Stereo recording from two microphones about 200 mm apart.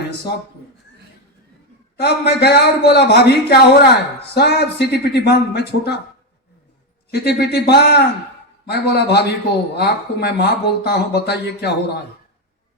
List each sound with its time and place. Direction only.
2.0 s speech: 55° left (ahead or behind)
7.1 s a man's voice: 55° left (ahead or behind)